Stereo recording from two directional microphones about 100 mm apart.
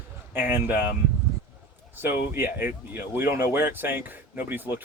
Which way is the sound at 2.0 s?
20° right (ahead or behind).